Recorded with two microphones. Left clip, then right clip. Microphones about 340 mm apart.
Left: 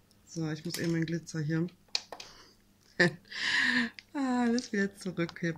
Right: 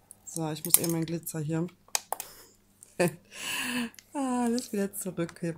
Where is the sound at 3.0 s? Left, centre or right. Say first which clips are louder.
Left 2 dB; centre.